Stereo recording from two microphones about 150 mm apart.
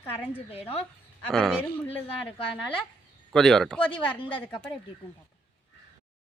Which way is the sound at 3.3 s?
5° left (ahead or behind).